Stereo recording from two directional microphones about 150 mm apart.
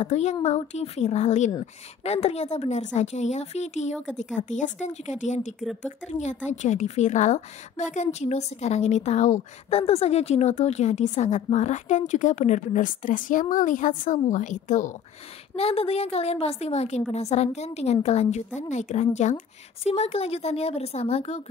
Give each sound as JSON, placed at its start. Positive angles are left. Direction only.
{"t": 0.0, "sound": "a woman's voice", "side_deg": 50}
{"t": 5.6, "sound": "speech", "side_deg": 0}
{"t": 5.9, "sound": "a woman's voice", "side_deg": 50}
{"t": 15.5, "sound": "a woman's voice", "side_deg": 40}